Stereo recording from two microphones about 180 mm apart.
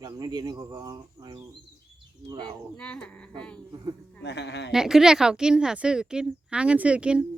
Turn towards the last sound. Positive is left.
turn(degrees=-5)  # may be behind; listen again after turning